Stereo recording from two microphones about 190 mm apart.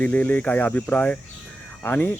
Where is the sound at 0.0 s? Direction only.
5° left (ahead or behind).